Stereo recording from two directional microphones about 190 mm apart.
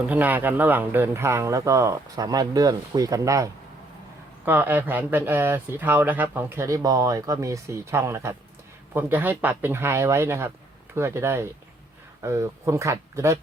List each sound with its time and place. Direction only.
0.1 s speech: 10° right (ahead or behind)